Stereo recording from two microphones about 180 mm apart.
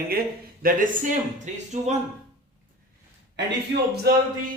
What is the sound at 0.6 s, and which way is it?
A man's voice, 45° right (ahead or behind).